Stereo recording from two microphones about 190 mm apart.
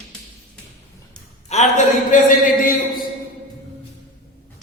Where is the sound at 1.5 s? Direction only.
40° left (ahead or behind).